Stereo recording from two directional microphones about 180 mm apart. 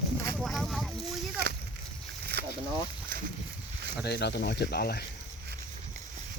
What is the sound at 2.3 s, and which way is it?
Boat, 65° right (ahead or behind).